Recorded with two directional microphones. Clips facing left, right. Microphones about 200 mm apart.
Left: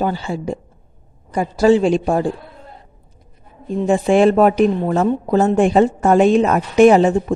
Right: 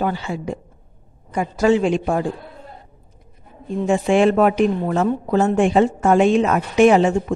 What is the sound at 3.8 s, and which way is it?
A woman's voice, 35° left (ahead or behind).